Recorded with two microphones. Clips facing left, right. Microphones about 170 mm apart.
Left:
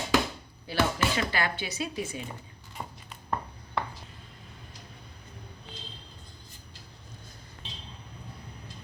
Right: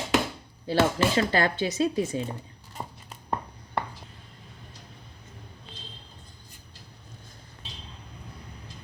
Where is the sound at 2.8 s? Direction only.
30° right (ahead or behind).